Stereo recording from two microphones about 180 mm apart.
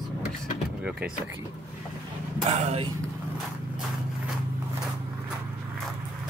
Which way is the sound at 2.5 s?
35° right (ahead or behind).